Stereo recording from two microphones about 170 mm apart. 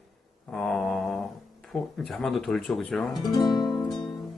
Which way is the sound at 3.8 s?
Centre (ahead or behind).